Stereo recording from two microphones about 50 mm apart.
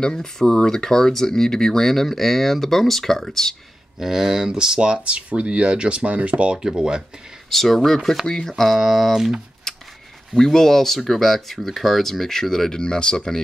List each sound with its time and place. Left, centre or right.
0.0 s speech: centre
4.0 s speech: centre; by 6.6 s right
6.6 s speech: centre
7.4 s speech: centre
9.7 s scissors: centre
10.3 s speech: centre